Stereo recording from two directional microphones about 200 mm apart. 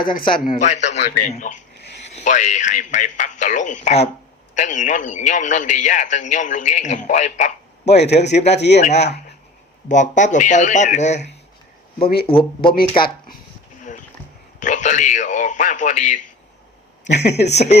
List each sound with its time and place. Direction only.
0.0 s speech: 45° left (ahead or behind)
0.5 s a man's voice: 35° left (ahead or behind)
8.1 s speech: 60° left (ahead or behind)
8.8 s a man's voice: 35° left (ahead or behind)
12.0 s speech: 50° left (ahead or behind)
14.6 s a man's voice: 35° left (ahead or behind)
17.0 s speech: 60° left (ahead or behind)
17.4 s a man's voice: 35° left (ahead or behind)